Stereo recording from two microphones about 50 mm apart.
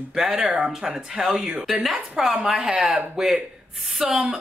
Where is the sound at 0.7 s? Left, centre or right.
Centre.